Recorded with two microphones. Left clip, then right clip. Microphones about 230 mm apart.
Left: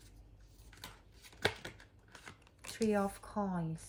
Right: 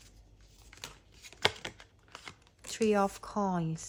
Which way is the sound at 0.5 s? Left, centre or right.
Centre.